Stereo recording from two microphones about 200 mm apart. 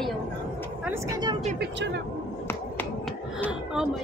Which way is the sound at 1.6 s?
60° right (ahead or behind).